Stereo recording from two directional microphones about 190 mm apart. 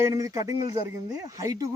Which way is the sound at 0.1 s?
15° right (ahead or behind).